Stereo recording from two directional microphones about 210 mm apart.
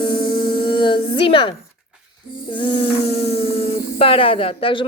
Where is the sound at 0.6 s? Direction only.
25° left (ahead or behind).